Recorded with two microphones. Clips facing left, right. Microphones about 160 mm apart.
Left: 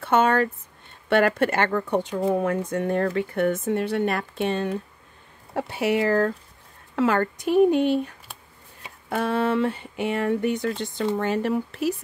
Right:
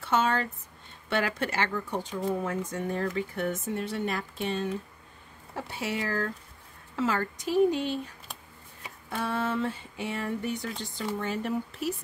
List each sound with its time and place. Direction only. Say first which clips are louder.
0.0 s speech: left 7 dB; 55° left (ahead or behind)
9.1 s speech: left 7 dB; 65° left (ahead or behind)